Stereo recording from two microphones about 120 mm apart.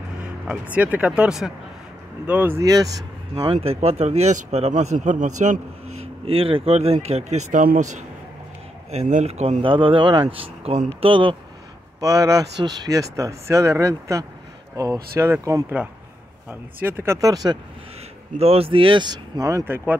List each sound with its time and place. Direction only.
0.2 s speech: 10° right (ahead or behind)
2.6 s speech: 30° right (ahead or behind)
3.5 s speech: 60° right (ahead or behind); by 5.6 s 90° right
6.2 s speech: 50° right (ahead or behind); by 8.0 s 90° right
8.9 s speech: 65° right (ahead or behind)
9.6 s speech: 45° right (ahead or behind)
12.0 s speech: 30° right (ahead or behind)
18.4 s speech: 55° right (ahead or behind); by 19.8 s 20° right (ahead or behind)